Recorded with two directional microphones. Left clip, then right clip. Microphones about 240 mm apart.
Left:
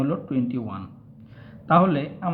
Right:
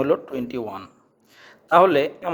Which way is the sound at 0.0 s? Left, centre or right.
Right.